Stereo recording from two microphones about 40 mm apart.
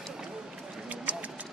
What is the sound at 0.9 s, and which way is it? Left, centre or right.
Run, right.